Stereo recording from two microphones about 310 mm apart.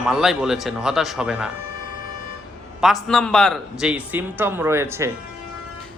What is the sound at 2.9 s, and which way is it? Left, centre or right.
Speech, centre.